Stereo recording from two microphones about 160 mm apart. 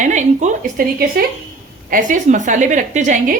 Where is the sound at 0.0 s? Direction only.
50° right (ahead or behind).